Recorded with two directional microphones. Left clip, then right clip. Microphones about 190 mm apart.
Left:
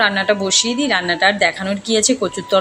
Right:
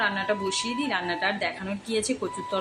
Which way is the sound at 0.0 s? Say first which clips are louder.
Left 10 dB; 20° left (ahead or behind).